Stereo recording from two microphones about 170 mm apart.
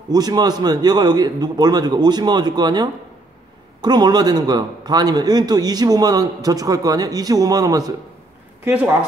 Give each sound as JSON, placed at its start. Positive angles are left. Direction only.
{"t": 0.1, "sound": "a man's voice", "side_deg": -25}
{"t": 8.6, "sound": "a woman's voice", "side_deg": -10}